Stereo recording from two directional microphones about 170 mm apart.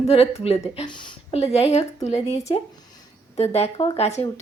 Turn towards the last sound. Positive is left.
turn(degrees=35)  # may be behind; listen again after turning